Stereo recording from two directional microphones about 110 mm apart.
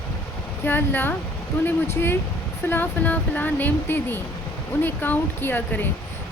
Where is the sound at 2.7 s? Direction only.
15° left (ahead or behind).